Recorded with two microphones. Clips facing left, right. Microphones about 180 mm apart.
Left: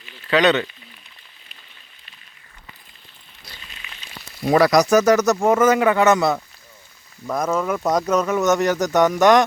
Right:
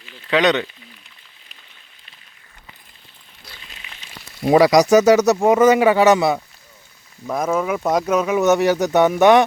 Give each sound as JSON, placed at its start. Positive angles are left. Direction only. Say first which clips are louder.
{"t": 0.3, "sound": "speech", "louder": "even", "side_deg": -15}
{"t": 4.4, "sound": "speech", "louder": "right 3 dB", "side_deg": -15}
{"t": 7.3, "sound": "speech", "louder": "right 1 dB", "side_deg": -5}